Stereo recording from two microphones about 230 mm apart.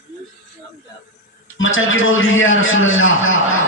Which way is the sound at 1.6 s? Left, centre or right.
Left.